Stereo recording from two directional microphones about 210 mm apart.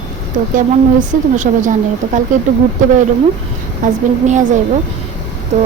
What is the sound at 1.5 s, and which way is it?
Speech, 35° right (ahead or behind).